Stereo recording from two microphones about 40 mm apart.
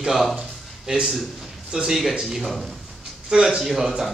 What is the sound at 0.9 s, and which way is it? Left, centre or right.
A man's voice, right.